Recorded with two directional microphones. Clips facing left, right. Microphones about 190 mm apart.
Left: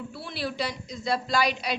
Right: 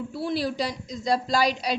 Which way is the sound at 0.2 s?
40° right (ahead or behind).